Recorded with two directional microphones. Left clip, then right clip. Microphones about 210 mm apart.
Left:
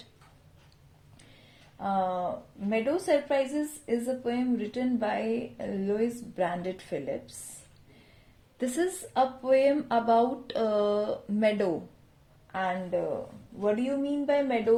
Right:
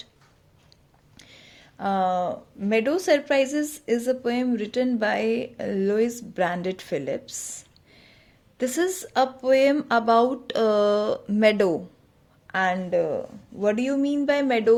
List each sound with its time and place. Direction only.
1.8 s a woman's voice: 40° right (ahead or behind)
8.5 s a woman's voice: 30° right (ahead or behind)